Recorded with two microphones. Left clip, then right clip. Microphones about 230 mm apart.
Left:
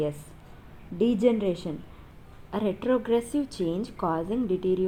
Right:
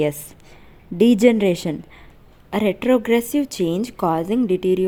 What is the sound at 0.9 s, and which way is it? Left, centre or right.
A woman's voice, right.